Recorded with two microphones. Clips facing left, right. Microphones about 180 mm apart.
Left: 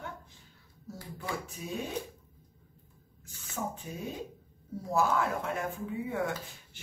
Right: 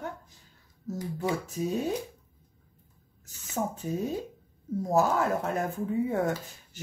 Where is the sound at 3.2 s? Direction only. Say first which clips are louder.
Right 5 dB; 40° right (ahead or behind).